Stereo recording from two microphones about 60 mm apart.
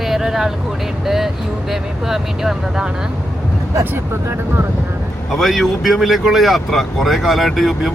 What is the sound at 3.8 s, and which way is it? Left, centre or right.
Speech, right.